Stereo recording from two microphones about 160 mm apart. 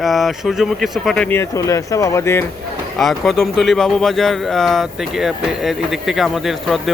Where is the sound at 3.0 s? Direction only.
Centre (ahead or behind).